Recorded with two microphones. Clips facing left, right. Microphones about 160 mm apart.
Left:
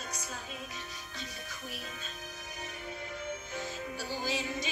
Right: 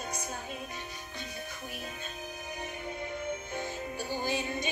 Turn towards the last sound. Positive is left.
turn(degrees=-55)  # may be behind; listen again after turning